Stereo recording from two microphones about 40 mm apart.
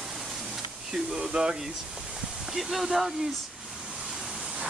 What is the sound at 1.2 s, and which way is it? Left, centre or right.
Speech, right.